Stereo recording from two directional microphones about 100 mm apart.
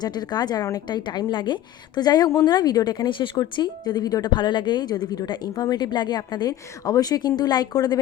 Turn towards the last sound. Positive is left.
turn(degrees=45)  # may be behind; listen again after turning